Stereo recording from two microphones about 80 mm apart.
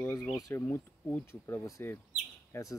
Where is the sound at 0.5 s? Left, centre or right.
Left.